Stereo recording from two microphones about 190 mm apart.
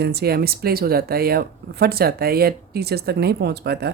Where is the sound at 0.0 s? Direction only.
60° right (ahead or behind).